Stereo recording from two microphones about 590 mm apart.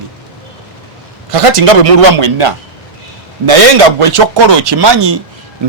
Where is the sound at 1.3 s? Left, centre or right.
Right.